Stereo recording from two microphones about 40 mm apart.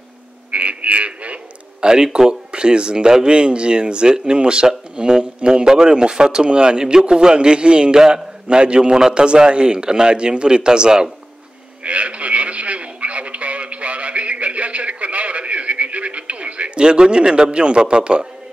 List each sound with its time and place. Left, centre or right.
0.5 s a sound: right
2.1 s a man's voice: centre
11.8 s radio: right